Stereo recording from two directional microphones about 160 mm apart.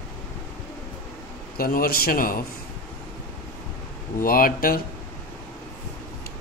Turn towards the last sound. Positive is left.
turn(degrees=65)  # may be behind; listen again after turning